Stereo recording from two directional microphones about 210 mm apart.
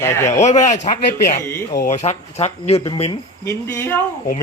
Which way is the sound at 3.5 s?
10° left (ahead or behind).